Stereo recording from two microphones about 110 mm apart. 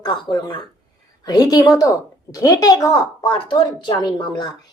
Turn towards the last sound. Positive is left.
turn(degrees=45)  # may be behind; listen again after turning